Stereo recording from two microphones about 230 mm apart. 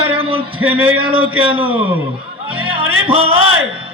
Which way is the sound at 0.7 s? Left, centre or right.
Centre.